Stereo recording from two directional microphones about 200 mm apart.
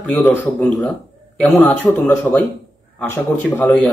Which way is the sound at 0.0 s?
Centre (ahead or behind).